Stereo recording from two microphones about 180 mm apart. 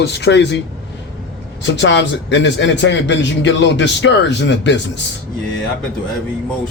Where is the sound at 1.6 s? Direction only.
85° left.